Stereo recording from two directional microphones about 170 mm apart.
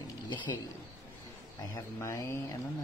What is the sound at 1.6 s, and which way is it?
Speech, 15° left (ahead or behind).